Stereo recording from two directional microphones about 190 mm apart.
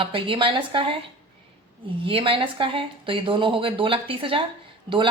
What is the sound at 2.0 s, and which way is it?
A woman's voice, 30° right (ahead or behind).